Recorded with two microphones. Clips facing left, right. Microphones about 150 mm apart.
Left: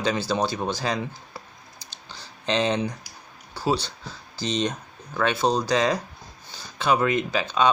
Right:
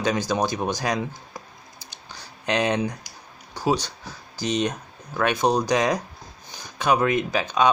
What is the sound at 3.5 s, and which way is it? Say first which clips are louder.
Speech: right 1 dB; 15° right (ahead or behind).